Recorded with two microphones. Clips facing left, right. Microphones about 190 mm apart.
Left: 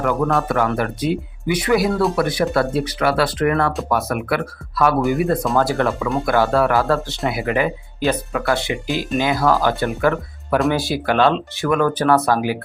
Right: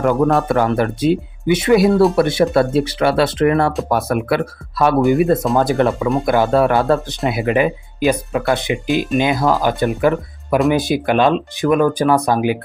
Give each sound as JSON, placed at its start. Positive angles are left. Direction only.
{"t": 0.0, "sound": "speech", "side_deg": -35}